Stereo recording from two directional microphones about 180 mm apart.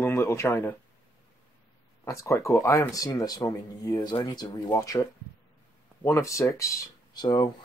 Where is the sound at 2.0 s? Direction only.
15° left (ahead or behind).